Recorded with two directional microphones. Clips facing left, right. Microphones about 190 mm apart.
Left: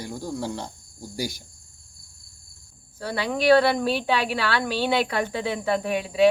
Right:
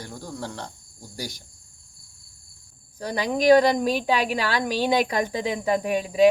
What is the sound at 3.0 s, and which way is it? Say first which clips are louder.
A woman's voice: right 2 dB; 15° right (ahead or behind).